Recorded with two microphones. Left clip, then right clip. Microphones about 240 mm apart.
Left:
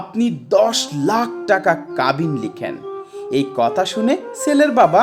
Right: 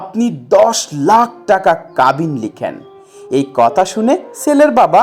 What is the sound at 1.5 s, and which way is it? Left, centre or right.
Speech, centre.